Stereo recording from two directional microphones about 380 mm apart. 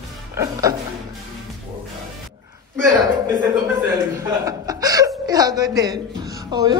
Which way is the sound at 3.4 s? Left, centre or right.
Centre.